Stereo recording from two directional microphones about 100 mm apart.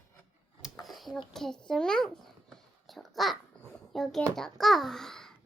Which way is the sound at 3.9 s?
Centre (ahead or behind).